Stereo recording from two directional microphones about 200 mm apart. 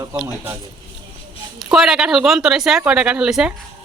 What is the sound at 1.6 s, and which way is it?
Speech, centre (ahead or behind).